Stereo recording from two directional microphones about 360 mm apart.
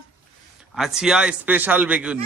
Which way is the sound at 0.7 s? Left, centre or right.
Centre.